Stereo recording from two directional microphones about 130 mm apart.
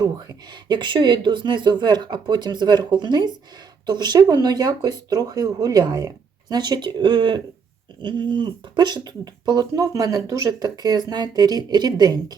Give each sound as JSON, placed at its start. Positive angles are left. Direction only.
{"t": 0.0, "sound": "speech", "side_deg": -30}